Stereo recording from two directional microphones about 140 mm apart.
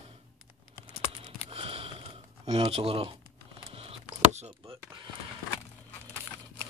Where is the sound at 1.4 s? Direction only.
40° right (ahead or behind).